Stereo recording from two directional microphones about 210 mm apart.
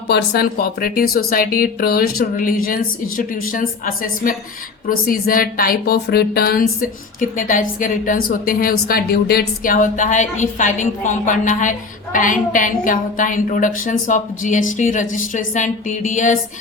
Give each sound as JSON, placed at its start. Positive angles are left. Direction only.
{"t": 0.1, "sound": "a woman's voice", "side_deg": 50}